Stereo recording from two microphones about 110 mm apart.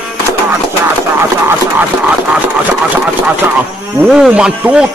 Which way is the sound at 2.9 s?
15° right (ahead or behind).